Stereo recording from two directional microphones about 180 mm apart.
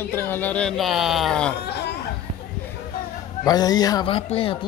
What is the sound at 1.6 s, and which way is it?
Chatter, 65° left (ahead or behind).